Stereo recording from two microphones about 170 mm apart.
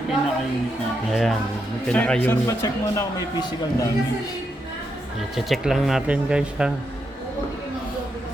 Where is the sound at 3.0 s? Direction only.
25° left (ahead or behind).